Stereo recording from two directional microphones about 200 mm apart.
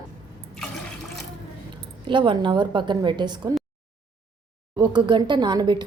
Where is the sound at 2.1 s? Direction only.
25° right (ahead or behind).